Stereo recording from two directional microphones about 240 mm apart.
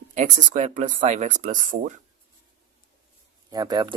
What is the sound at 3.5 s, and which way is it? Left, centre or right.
Speech, centre.